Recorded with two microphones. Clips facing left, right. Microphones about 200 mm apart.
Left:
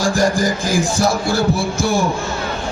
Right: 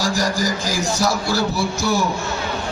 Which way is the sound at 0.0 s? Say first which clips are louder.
Left 5 dB; 50° left (ahead or behind).